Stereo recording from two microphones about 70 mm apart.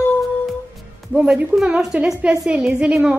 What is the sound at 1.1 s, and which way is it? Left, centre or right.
A woman's voice, centre.